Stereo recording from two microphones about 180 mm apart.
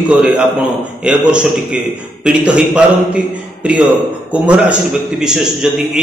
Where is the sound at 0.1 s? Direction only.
5° right (ahead or behind).